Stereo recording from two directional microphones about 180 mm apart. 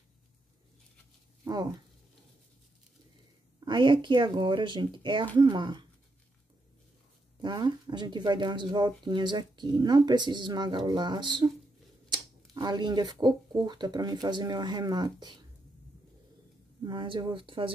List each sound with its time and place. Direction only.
1.4 s a sound: 20° right (ahead or behind)
3.6 s speech: 25° right (ahead or behind)
7.4 s speech: 25° right (ahead or behind)
16.8 s speech: 25° right (ahead or behind)